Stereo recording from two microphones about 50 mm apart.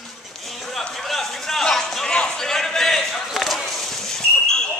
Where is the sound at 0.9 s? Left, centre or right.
Centre.